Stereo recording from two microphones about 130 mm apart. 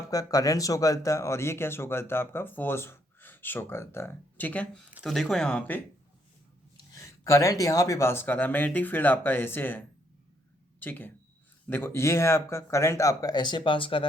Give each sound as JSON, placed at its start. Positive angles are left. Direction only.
{"t": 0.1, "sound": "speech", "side_deg": 30}
{"t": 6.7, "sound": "speech", "side_deg": 25}